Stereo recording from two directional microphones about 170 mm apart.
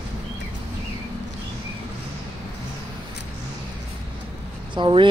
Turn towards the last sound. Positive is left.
turn(degrees=-30)  # may be behind; listen again after turning